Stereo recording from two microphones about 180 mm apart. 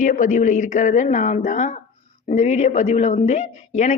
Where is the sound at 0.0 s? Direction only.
45° left (ahead or behind).